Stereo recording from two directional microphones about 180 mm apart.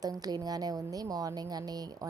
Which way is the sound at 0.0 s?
20° right (ahead or behind).